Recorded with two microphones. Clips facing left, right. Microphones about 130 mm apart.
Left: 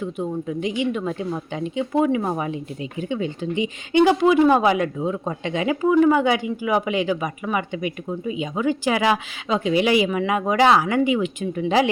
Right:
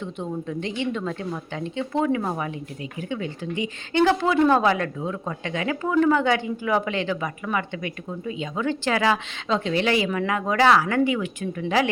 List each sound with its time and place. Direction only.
0.0 s speech: 10° left (ahead or behind)